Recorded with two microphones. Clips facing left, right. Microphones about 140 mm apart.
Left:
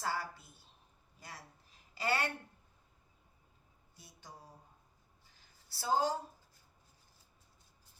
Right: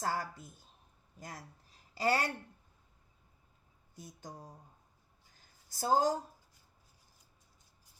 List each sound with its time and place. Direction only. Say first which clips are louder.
0.0 s speech: right 2 dB; 45° right (ahead or behind)
2.0 s speech: right 4 dB; 40° right (ahead or behind)
3.9 s speech: right 7 dB; 45° right (ahead or behind)
5.6 s speech: right 3 dB; 45° right (ahead or behind)